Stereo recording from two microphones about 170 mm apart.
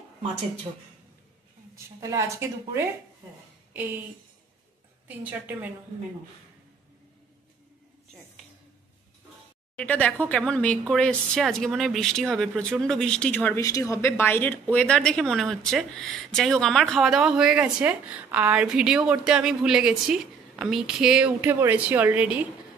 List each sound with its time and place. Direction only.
2.0 s speech: 20° right (ahead or behind)
5.0 s speech: 10° right (ahead or behind)
9.8 s a woman's voice: 5° left (ahead or behind); by 22.5 s 10° right (ahead or behind)